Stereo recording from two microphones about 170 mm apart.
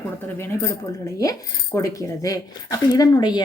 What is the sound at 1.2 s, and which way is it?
Speech, 20° left (ahead or behind).